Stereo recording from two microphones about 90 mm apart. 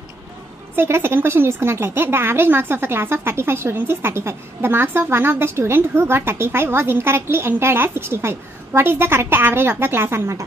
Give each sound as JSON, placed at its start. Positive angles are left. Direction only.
{"t": 0.7, "sound": "speech", "side_deg": -25}